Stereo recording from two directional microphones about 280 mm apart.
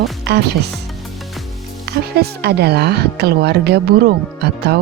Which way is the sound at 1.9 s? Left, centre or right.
Right.